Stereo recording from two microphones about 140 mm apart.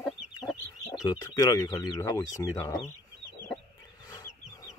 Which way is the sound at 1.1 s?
25° left (ahead or behind).